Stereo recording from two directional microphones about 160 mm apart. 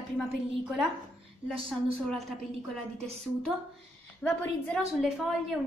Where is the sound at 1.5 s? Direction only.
35° right (ahead or behind).